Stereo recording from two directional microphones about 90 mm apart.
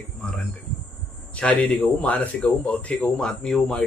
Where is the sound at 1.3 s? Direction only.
15° left (ahead or behind).